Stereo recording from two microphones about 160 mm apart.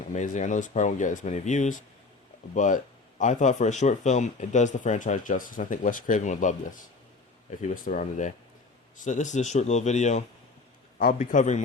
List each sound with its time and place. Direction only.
0.1 s speech: 50° left (ahead or behind)